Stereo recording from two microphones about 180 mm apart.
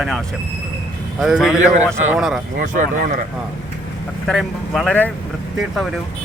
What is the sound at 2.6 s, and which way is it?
Speech, 50° right (ahead or behind).